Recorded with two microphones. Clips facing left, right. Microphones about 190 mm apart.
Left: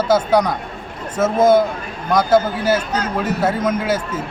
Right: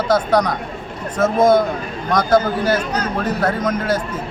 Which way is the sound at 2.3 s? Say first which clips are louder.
Right 1 dB; 25° left (ahead or behind).